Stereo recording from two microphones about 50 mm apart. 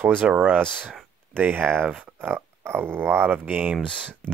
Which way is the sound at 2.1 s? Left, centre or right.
Right.